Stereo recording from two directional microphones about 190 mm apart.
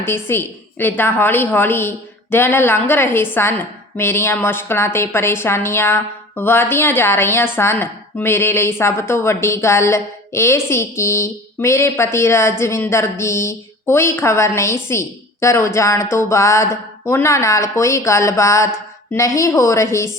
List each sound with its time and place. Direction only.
0.0 s a woman's voice: 10° left (ahead or behind)